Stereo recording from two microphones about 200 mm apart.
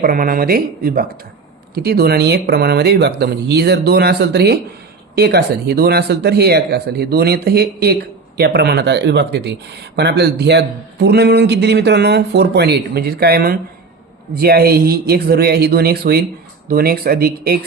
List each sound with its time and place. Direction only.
0.0 s speech: 45° right (ahead or behind)